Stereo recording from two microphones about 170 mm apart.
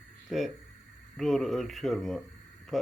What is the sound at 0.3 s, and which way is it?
Speech, centre (ahead or behind).